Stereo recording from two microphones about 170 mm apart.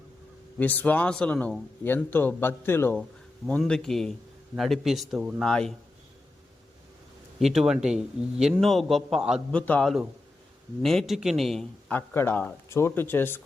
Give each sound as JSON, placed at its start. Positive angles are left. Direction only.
{"t": 0.6, "sound": "a man's voice", "side_deg": 10}
{"t": 7.3, "sound": "a man's voice", "side_deg": 0}
{"t": 9.6, "sound": "a man's voice", "side_deg": 5}